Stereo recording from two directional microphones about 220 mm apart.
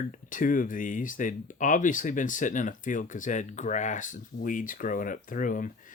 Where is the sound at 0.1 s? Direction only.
35° left (ahead or behind).